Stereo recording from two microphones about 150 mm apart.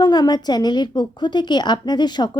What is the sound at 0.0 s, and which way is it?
A woman's voice, 25° left (ahead or behind).